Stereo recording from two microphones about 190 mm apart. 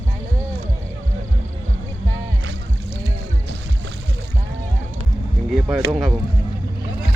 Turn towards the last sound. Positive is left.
turn(degrees=0)  # may be behind; listen again after turning